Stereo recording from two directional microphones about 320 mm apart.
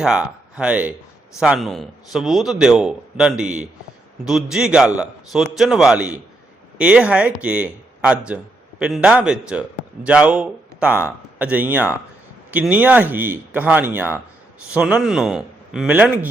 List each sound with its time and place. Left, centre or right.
0.0 s a man's voice: centre